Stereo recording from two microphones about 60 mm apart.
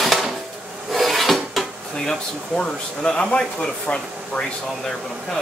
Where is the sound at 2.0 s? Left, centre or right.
Centre.